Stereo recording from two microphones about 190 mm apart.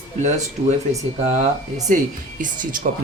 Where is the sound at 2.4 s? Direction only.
45° right (ahead or behind).